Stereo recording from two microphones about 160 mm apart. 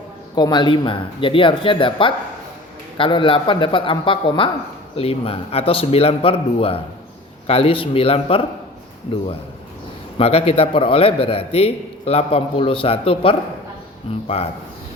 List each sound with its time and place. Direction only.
0.3 s a man's voice: 25° left (ahead or behind)
10.2 s a man's voice: 35° left (ahead or behind)